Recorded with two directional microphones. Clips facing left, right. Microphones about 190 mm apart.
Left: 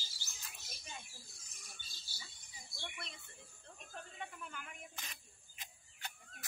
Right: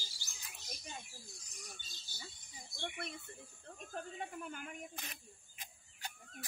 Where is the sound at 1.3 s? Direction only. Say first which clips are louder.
Right 7 dB; 20° right (ahead or behind).